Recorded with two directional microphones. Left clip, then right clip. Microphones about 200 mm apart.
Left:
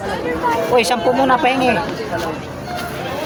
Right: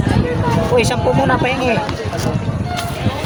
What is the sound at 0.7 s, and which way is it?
Speech, 20° left (ahead or behind).